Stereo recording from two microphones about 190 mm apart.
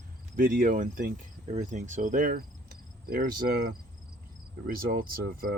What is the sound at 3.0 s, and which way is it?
Cricket, 55° right (ahead or behind).